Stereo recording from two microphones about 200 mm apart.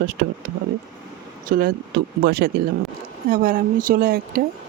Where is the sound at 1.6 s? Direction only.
50° right (ahead or behind).